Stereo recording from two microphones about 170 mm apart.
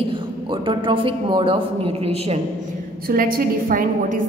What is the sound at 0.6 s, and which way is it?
A man's voice, 30° right (ahead or behind).